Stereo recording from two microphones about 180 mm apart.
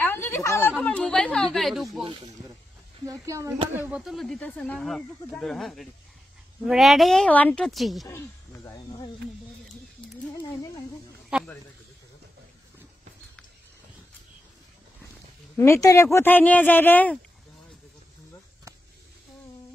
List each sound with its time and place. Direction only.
0.0 s a sound: 15° left (ahead or behind)
0.7 s chatter: 5° left (ahead or behind)
2.0 s speech: 25° right (ahead or behind); by 4.0 s 10° right (ahead or behind)
4.0 s speech: centre (ahead or behind)
8.1 s snake: 15° left (ahead or behind)
11.3 s a sound: 5° right (ahead or behind)
15.5 s speech: 15° left (ahead or behind)